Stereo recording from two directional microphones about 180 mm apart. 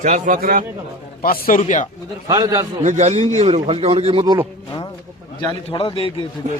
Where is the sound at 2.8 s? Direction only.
40° right (ahead or behind).